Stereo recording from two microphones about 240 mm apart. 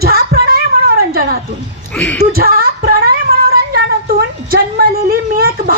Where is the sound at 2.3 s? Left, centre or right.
Right.